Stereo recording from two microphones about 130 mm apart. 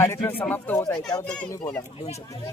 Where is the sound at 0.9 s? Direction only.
25° left (ahead or behind).